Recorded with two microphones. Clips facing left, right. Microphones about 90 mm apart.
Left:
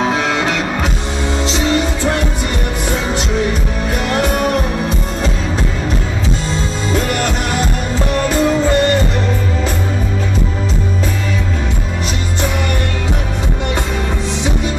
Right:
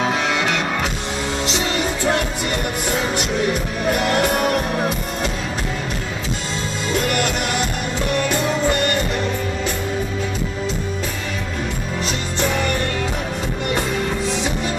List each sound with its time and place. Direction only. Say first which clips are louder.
0.0 s music: left 4 dB; 30° left (ahead or behind)
8.2 s music: left 7 dB; 35° left (ahead or behind)